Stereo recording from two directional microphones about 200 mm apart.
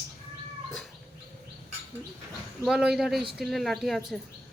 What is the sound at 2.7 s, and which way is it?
A woman's voice, 5° right (ahead or behind).